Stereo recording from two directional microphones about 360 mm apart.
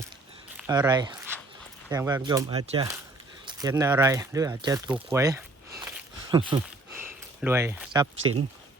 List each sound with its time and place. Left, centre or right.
0.5 s speech: centre
5.0 s a sound: centre
8.2 s speech: right